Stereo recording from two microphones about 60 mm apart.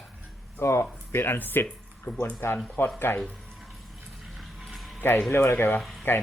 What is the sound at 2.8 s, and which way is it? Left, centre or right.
Speech, left.